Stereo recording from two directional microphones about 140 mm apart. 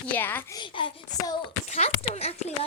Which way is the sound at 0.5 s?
35° left (ahead or behind).